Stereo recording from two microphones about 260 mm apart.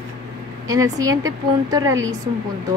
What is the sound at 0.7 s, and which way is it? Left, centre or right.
Speech, centre.